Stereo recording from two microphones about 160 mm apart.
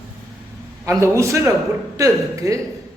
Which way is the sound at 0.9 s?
20° right (ahead or behind).